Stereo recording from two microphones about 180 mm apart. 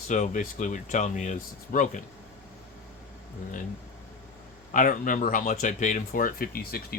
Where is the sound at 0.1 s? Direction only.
45° left (ahead or behind).